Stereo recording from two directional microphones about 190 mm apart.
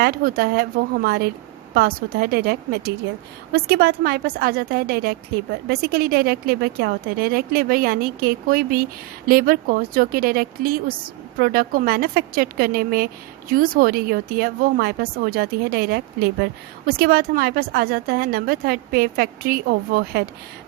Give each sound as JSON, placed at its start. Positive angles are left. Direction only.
{"t": 0.0, "sound": "a woman's voice", "side_deg": -50}